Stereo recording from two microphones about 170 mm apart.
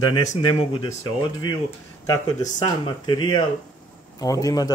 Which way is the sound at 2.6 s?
25° left (ahead or behind).